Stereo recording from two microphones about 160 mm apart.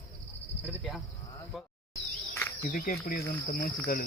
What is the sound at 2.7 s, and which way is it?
Speech, 60° left (ahead or behind).